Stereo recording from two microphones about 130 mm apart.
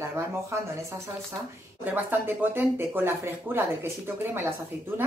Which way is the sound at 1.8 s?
15° right (ahead or behind).